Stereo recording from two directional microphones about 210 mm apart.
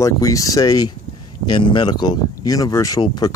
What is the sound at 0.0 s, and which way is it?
Speech, 15° left (ahead or behind).